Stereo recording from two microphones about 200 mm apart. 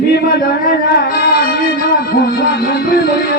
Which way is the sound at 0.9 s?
50° left (ahead or behind).